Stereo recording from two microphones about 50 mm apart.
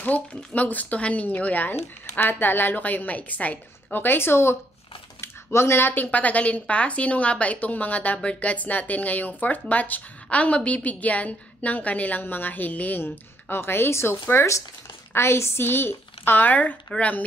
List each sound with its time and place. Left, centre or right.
0.0 s speech: left
2.1 s speech: left
5.2 s a sound: left
5.9 s speech: left
12.2 s speech: left
13.0 s a woman's voice: left
15.1 s a woman's voice: left